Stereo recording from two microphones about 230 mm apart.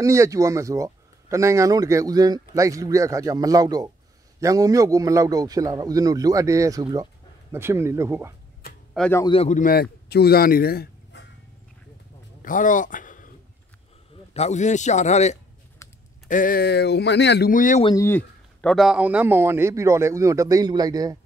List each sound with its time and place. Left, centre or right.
0.0 s speech: centre
8.9 s speech: centre
9.2 s a man's voice: left
12.4 s a sound: left
14.3 s speech: left
17.8 s speech: centre